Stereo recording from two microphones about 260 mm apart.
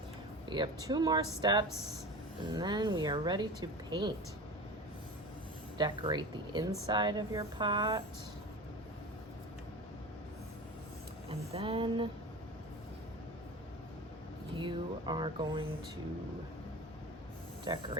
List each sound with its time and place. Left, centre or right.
0.4 s a woman's voice: centre
5.7 s a woman's voice: centre
11.3 s a sound: right
14.6 s a woman's voice: centre
17.7 s a woman's voice: centre